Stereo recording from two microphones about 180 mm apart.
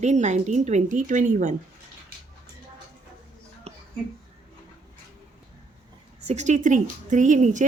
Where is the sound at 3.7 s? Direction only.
35° right (ahead or behind).